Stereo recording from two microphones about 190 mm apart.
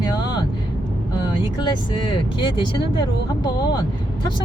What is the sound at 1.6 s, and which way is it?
Speech, 25° left (ahead or behind).